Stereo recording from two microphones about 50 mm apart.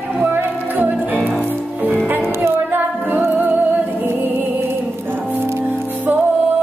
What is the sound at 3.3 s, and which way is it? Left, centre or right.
Music, right.